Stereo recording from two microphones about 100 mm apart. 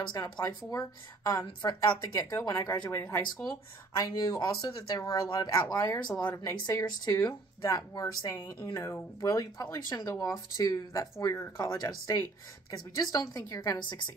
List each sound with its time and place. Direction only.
0.2 s a woman's voice: 35° left (ahead or behind)
9.2 s a woman's voice: 40° left (ahead or behind)